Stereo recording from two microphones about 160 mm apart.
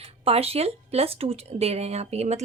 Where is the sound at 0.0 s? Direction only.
40° right (ahead or behind).